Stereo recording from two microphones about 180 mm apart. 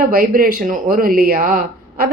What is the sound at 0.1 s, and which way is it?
A man's voice, 55° right (ahead or behind).